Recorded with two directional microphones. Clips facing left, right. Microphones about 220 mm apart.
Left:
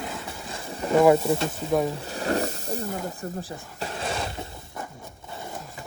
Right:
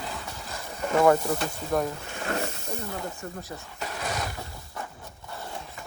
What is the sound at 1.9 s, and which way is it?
Hiss, 35° left (ahead or behind).